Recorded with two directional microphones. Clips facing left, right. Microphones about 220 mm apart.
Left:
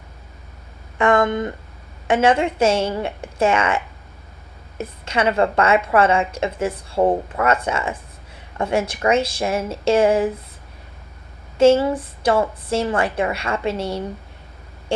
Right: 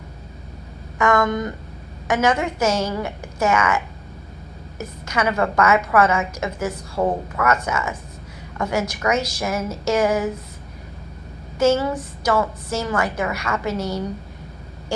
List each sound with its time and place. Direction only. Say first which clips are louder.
0.9 s a sound: left 2 dB; 30° left (ahead or behind)
2.0 s a woman's voice: left 3 dB; 30° left (ahead or behind)
4.8 s a woman's voice: left 2 dB; 30° left (ahead or behind)
11.6 s a woman's voice: left 4 dB; 30° left (ahead or behind)